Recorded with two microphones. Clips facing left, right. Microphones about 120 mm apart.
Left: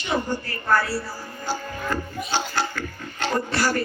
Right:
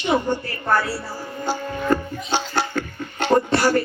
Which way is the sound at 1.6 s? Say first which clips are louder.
Right 7 dB; 25° right (ahead or behind).